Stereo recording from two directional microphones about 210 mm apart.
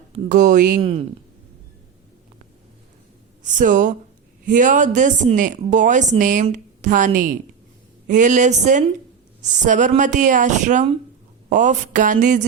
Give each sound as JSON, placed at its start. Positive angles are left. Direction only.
{"t": 0.1, "sound": "a woman's voice", "side_deg": -35}
{"t": 0.8, "sound": "speech", "side_deg": -25}
{"t": 3.4, "sound": "a woman's voice", "side_deg": -40}